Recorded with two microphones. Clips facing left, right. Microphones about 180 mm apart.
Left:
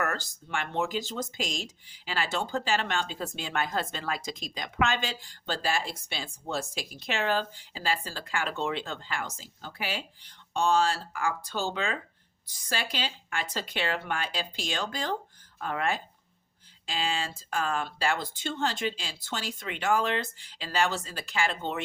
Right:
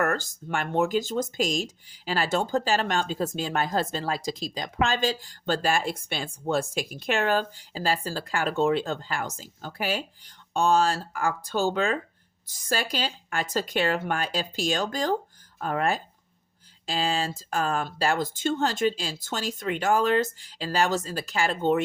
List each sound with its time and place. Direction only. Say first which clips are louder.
0.0 s speech: right 5 dB; 50° right (ahead or behind)